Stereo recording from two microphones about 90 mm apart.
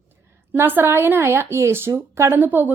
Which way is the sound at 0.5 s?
25° right (ahead or behind).